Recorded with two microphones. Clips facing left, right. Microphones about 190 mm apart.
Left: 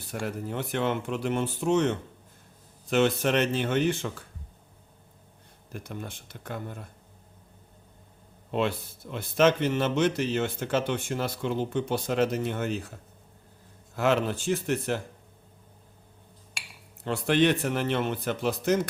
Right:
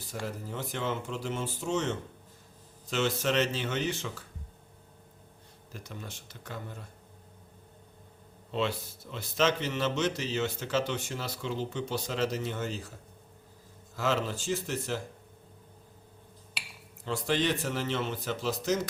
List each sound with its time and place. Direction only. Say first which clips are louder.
0.0 s a man's voice: left 5 dB; 65° left (ahead or behind)
5.7 s a man's voice: left 6 dB; 55° left (ahead or behind)
8.5 s a man's voice: left 4 dB; 55° left (ahead or behind)
13.9 s a man's voice: left 5 dB; 60° left (ahead or behind)
17.0 s a man's voice: left 6 dB; 60° left (ahead or behind)